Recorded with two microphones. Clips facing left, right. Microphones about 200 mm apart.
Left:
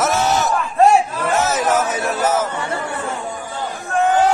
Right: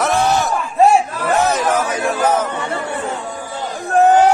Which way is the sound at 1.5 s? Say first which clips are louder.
Even; 5° left (ahead or behind).